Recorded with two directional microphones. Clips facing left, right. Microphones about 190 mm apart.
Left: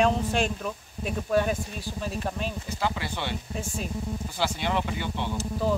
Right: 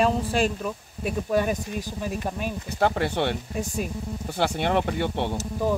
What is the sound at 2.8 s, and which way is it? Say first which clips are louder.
Speech: right 8 dB; 55° right (ahead or behind).